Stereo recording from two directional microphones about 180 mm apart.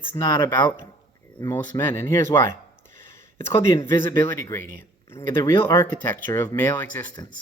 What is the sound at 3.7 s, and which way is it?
Speech, 15° left (ahead or behind).